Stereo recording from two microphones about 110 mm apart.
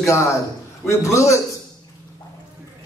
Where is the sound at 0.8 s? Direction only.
30° left (ahead or behind).